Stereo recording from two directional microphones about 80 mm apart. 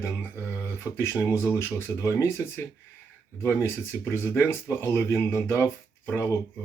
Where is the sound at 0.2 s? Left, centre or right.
Left.